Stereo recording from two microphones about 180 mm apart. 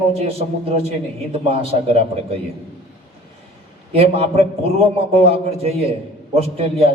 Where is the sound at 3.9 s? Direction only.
35° right (ahead or behind).